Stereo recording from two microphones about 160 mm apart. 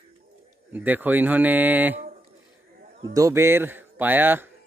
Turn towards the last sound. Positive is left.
turn(degrees=-10)  # may be behind; listen again after turning